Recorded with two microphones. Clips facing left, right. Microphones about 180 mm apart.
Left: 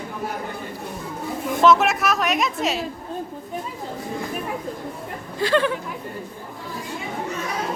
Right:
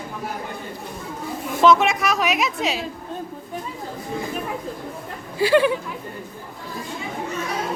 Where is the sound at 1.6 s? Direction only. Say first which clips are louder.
Right 1 dB; 5° left (ahead or behind).